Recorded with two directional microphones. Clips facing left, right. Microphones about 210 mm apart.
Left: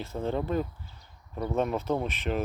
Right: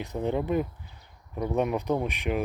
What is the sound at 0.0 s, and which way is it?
Speech, 15° right (ahead or behind).